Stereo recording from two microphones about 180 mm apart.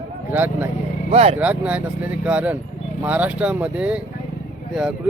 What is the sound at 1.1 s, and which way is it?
Speech, 35° right (ahead or behind).